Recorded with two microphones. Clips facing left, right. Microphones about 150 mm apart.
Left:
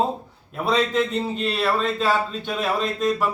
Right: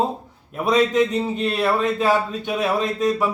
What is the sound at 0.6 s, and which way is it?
A man's voice, 10° right (ahead or behind).